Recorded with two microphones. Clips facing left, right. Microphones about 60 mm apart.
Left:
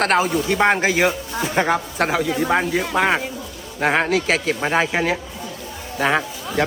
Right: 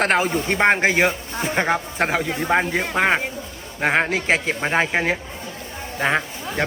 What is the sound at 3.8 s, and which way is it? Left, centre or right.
Speech, centre.